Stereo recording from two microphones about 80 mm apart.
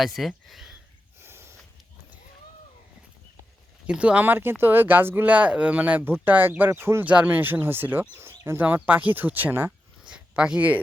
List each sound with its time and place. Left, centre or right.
0.0 s speech: centre
1.2 s snort: right
3.8 s speech: centre; by 7.0 s right
7.0 s speech: centre
10.1 s a sound: centre